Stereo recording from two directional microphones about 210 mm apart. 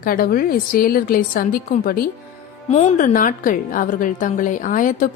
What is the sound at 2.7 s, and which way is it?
A woman's voice, 30° left (ahead or behind).